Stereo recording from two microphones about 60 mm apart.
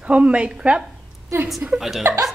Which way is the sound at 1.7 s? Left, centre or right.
Centre.